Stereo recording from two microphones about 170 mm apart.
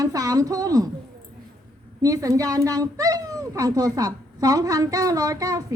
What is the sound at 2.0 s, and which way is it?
A child's voice, 20° right (ahead or behind).